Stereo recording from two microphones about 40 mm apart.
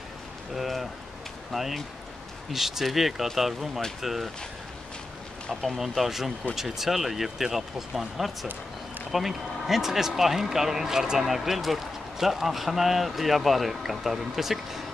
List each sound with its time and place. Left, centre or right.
0.6 s speech: centre
5.5 s speech: centre
5.8 s speech: centre